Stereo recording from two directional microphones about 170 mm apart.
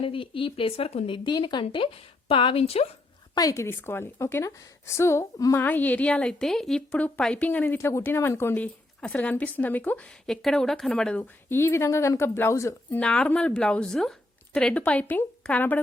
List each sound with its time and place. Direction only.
0.0 s speech: 30° left (ahead or behind)
3.3 s a woman's voice: 20° left (ahead or behind)